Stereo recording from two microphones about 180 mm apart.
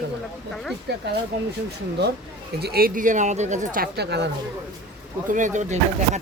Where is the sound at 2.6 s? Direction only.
60° right (ahead or behind).